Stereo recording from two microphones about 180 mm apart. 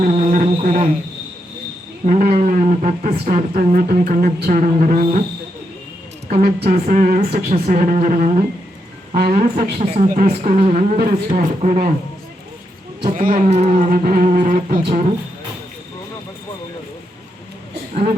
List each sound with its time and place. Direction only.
0.0 s a sound: 40° right (ahead or behind)
0.6 s speech: 45° right (ahead or behind)
2.0 s speech: 40° right (ahead or behind)
6.3 s speech: 55° right (ahead or behind)
7.5 s speech: 40° right (ahead or behind)
13.1 s speech: 45° right (ahead or behind)